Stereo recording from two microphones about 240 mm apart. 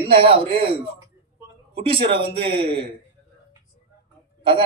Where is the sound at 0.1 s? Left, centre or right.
Right.